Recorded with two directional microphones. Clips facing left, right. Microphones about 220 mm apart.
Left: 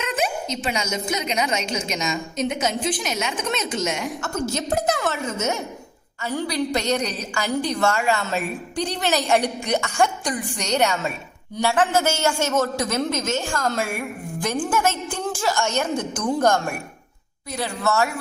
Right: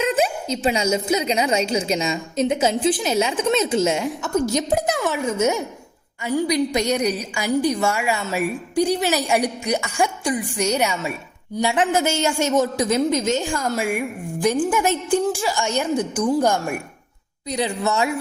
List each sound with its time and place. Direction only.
0.1 s a woman's voice: 30° right (ahead or behind)
4.2 s a woman's voice: 15° right (ahead or behind)
10.0 s a woman's voice: centre (ahead or behind)
11.6 s a woman's voice: 15° right (ahead or behind)